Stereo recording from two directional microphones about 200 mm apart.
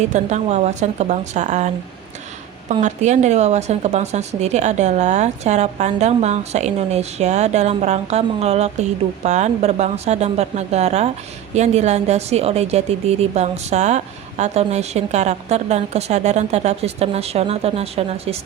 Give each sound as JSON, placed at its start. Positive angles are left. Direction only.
{"t": 0.1, "sound": "a woman's voice", "side_deg": -35}